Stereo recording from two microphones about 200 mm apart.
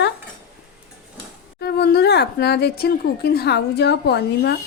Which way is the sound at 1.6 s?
55° left (ahead or behind).